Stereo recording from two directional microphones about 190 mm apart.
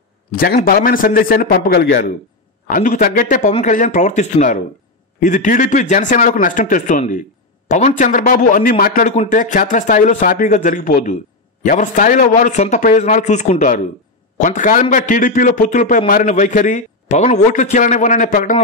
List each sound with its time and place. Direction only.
0.3 s a man's voice: 50° left (ahead or behind)